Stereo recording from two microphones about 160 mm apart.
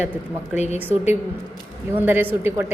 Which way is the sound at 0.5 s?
45° left (ahead or behind).